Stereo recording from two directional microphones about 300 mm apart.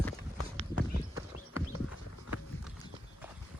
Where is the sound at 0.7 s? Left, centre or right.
Left.